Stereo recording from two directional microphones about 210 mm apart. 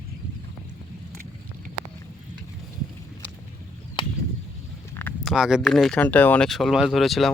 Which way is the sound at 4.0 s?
20° left (ahead or behind).